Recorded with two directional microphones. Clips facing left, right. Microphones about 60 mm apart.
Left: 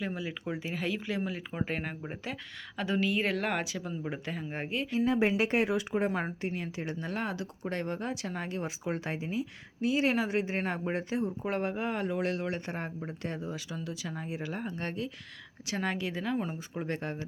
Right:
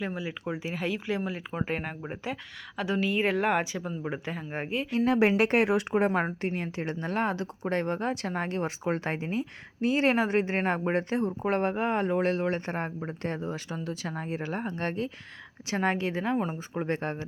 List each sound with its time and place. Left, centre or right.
0.0 s speech: centre
4.9 s speech: right